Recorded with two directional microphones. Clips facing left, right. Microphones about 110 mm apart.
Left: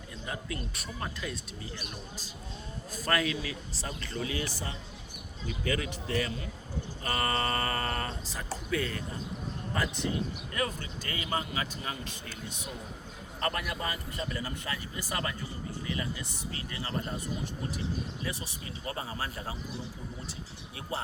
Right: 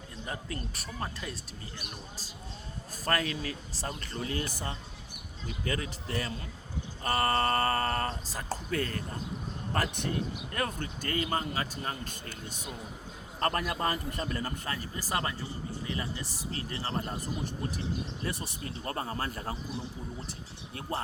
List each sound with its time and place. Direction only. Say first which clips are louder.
0.3 s speech: left 1 dB; 35° right (ahead or behind)
2.9 s speech: left 1 dB; 40° right (ahead or behind); by 4.8 s 55° right (ahead or behind)
5.8 s speech: left 3 dB; 35° right (ahead or behind)
10.5 s speech: even; 50° right (ahead or behind)
11.2 s speech: right 1 dB; 40° right (ahead or behind)
18.2 s speech: right 2 dB; 50° right (ahead or behind)
20.9 s speech: right 1 dB; 45° right (ahead or behind)